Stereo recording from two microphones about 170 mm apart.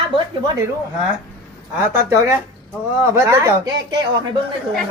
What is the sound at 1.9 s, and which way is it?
Speech, 20° right (ahead or behind).